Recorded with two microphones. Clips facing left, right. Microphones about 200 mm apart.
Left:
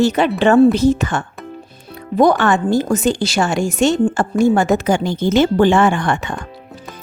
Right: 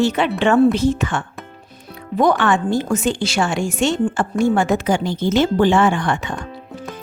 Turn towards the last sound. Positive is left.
turn(degrees=50)  # may be behind; listen again after turning